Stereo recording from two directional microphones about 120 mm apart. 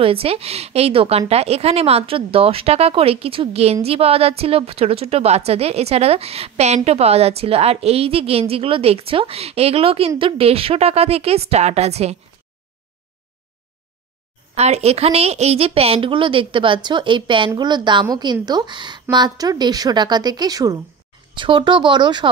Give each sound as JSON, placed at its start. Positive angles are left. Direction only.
{"t": 0.0, "sound": "a woman's voice", "side_deg": -55}
{"t": 14.5, "sound": "a woman's voice", "side_deg": -65}
{"t": 21.4, "sound": "a woman's voice", "side_deg": -45}